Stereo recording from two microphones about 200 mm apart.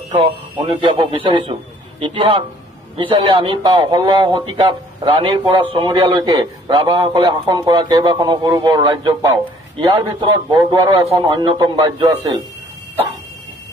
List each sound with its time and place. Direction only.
0.1 s a man's voice: 25° right (ahead or behind)